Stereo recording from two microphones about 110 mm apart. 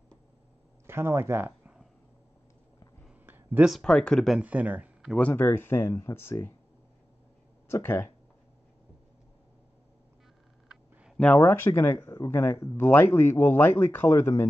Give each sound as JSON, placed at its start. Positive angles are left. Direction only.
{"t": 0.8, "sound": "speech", "side_deg": -20}
{"t": 3.3, "sound": "a sound", "side_deg": -20}
{"t": 3.8, "sound": "speech", "side_deg": 5}
{"t": 4.4, "sound": "speech", "side_deg": -15}
{"t": 5.2, "sound": "speech", "side_deg": 15}
{"t": 7.7, "sound": "speech", "side_deg": 20}
{"t": 11.1, "sound": "speech", "side_deg": 15}